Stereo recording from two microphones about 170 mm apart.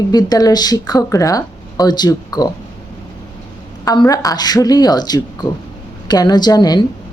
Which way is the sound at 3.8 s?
25° left (ahead or behind).